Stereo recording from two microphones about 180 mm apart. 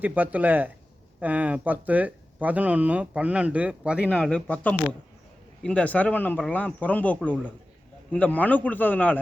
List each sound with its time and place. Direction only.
0.0 s speech: 10° right (ahead or behind)
4.1 s speech: 5° left (ahead or behind)